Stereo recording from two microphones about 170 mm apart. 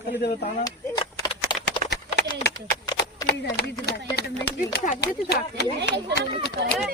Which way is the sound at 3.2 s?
70° left (ahead or behind).